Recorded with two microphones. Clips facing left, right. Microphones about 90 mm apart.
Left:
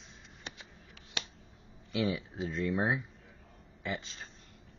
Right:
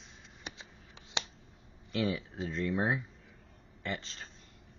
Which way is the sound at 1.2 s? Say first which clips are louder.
Right 3 dB; 20° right (ahead or behind).